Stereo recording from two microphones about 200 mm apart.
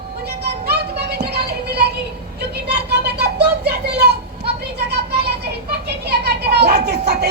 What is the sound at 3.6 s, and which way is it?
Vehicle, 55° right (ahead or behind).